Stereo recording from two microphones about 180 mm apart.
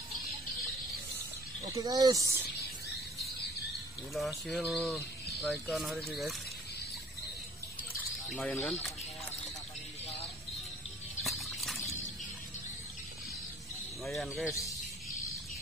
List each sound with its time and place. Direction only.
1.7 s speech: 20° right (ahead or behind)
4.1 s bird: centre (ahead or behind)
4.9 s speech: 5° left (ahead or behind)
5.7 s bird: centre (ahead or behind)
8.4 s bird: 5° left (ahead or behind)
11.2 s horse: centre (ahead or behind)
14.0 s bird: centre (ahead or behind)
14.5 s a sound: 15° left (ahead or behind)